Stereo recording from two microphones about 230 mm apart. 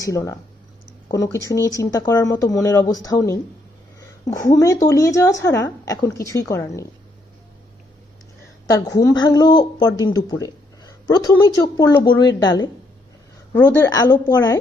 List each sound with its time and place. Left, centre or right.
0.0 s speech: centre
8.7 s speech: centre